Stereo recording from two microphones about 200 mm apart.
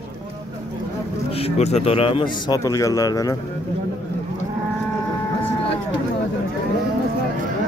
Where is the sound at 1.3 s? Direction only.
30° left (ahead or behind).